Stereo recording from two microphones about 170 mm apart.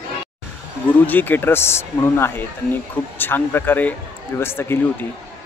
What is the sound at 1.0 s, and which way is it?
Speech, 10° left (ahead or behind).